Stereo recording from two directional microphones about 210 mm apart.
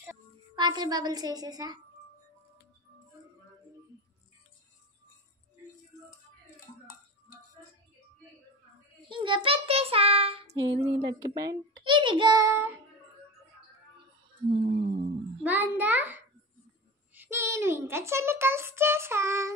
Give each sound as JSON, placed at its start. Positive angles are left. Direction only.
{"t": 0.0, "sound": "a woman's voice", "side_deg": -15}
{"t": 9.1, "sound": "a child's voice", "side_deg": -25}
{"t": 14.7, "sound": "a sound", "side_deg": -55}
{"t": 15.4, "sound": "a child's voice", "side_deg": -10}